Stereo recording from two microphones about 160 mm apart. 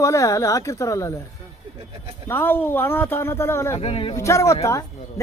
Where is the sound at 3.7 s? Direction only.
35° left (ahead or behind).